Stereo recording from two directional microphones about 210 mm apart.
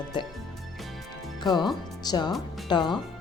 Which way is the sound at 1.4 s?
20° left (ahead or behind).